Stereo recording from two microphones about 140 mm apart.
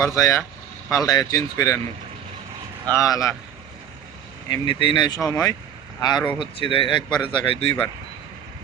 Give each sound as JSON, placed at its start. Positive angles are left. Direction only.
{"t": 0.0, "sound": "speech", "side_deg": 20}
{"t": 3.0, "sound": "speech", "side_deg": 25}
{"t": 4.4, "sound": "speech", "side_deg": 30}